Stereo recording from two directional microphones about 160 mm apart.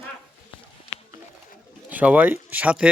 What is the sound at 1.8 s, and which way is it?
Speech, 10° right (ahead or behind).